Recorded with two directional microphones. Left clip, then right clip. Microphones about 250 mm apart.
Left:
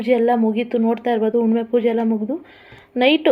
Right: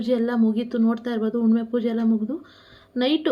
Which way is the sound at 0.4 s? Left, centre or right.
Centre.